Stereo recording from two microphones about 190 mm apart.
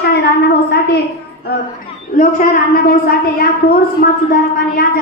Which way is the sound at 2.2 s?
50° left (ahead or behind).